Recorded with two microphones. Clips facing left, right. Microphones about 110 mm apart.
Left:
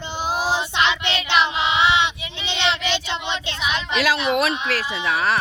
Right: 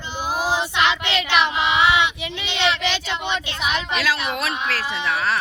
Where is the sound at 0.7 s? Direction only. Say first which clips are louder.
Right 1 dB; 20° left (ahead or behind).